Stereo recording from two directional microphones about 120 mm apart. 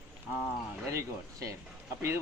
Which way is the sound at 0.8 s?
25° right (ahead or behind).